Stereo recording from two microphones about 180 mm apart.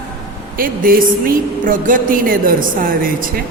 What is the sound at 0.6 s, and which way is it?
A man's voice, 50° right (ahead or behind).